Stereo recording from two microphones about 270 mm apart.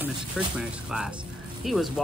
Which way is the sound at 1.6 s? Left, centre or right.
Centre.